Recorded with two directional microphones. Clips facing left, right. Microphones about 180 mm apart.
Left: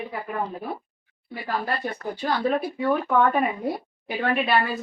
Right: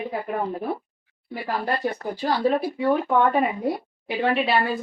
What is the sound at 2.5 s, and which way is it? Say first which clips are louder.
Speech: right 2 dB; 20° right (ahead or behind).